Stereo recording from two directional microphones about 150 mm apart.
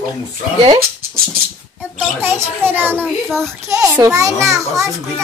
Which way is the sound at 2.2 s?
15° right (ahead or behind).